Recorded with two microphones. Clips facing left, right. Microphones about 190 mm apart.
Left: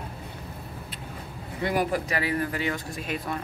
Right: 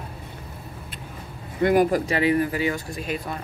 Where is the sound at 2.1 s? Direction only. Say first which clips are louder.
Right 7 dB; 20° right (ahead or behind).